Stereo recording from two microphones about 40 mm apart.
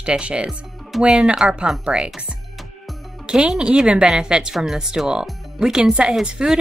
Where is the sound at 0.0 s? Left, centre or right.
Right.